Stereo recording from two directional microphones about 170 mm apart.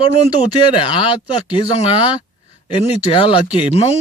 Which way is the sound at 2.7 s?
30° left (ahead or behind).